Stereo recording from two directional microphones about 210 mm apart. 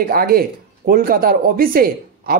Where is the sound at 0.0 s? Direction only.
45° right (ahead or behind).